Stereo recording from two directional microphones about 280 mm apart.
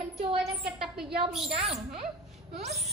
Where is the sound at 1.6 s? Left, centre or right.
Right.